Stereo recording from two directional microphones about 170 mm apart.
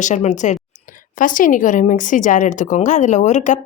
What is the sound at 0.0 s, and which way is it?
A woman's voice, 45° left (ahead or behind).